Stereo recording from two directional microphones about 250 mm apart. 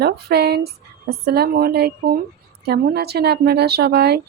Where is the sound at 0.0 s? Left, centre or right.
Right.